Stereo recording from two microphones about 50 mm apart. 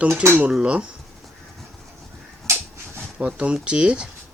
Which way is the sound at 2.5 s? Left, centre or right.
Right.